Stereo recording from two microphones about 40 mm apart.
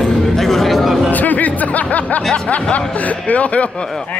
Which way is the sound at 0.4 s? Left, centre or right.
Centre.